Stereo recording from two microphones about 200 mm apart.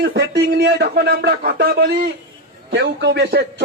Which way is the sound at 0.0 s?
55° right (ahead or behind).